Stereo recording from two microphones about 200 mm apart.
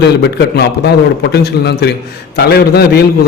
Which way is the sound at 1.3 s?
55° left (ahead or behind).